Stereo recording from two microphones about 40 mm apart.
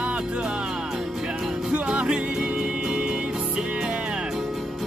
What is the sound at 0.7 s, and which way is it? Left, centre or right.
Music, centre.